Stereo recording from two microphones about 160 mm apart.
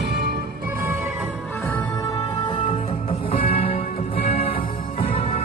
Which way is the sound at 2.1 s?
30° left (ahead or behind).